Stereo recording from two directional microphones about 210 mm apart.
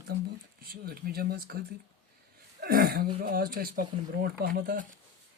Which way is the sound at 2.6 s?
45° right (ahead or behind).